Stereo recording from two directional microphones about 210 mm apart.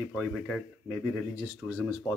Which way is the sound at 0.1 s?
5° left (ahead or behind).